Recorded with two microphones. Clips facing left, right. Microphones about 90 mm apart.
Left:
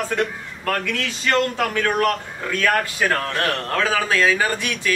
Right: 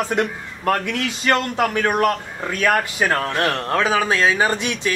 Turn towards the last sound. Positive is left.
turn(degrees=-20)  # may be behind; listen again after turning